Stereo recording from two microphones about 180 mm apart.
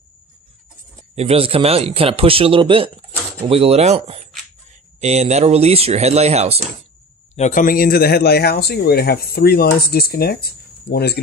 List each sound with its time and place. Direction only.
1.1 s speech: 35° right (ahead or behind)
7.3 s speech: 45° left (ahead or behind); by 11.1 s 60° left (ahead or behind)